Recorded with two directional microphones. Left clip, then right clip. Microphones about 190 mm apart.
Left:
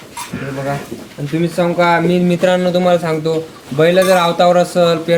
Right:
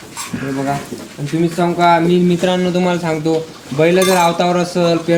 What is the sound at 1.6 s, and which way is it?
Speech, 50° left (ahead or behind).